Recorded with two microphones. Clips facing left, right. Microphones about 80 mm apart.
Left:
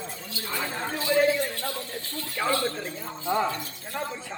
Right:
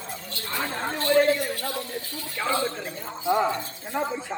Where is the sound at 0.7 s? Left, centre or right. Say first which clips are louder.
Right 4 dB; centre.